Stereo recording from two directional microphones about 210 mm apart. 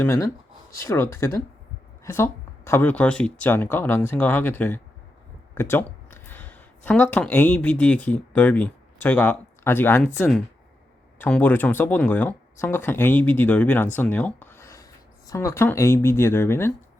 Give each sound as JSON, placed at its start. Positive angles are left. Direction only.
{"t": 0.0, "sound": "speech", "side_deg": 15}